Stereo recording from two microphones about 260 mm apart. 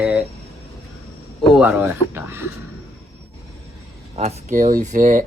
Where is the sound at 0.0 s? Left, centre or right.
Centre.